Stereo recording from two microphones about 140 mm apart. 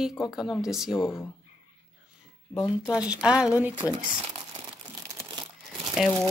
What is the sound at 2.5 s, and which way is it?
Speech, 5° right (ahead or behind).